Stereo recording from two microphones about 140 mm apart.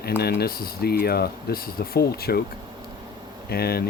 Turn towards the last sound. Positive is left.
turn(degrees=90)